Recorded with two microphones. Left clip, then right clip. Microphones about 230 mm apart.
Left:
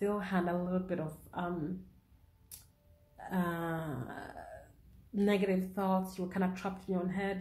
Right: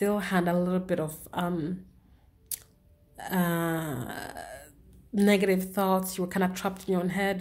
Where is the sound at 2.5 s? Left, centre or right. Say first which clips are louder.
Right 14 dB; right.